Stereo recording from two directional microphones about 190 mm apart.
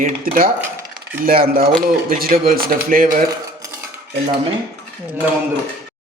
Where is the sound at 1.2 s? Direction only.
50° right (ahead or behind).